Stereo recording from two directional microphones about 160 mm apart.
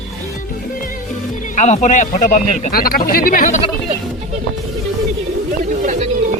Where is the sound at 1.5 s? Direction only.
45° left (ahead or behind).